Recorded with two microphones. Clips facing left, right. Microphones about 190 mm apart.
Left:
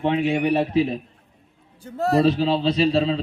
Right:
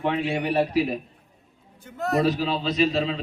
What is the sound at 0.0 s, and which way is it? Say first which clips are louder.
Speech: left 4 dB; 20° left (ahead or behind).